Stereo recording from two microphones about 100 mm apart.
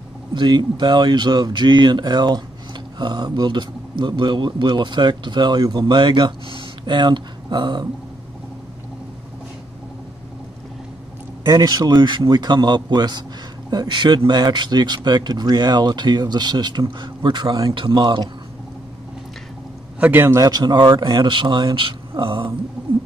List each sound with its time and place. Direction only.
0.3 s speech: 50° right (ahead or behind)
11.5 s speech: 40° right (ahead or behind)
20.0 s a man's voice: 20° right (ahead or behind)
20.3 s speech: 40° right (ahead or behind); by 22.5 s 60° right (ahead or behind)